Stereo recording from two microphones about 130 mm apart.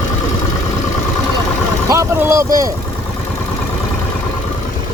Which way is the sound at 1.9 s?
20° right (ahead or behind).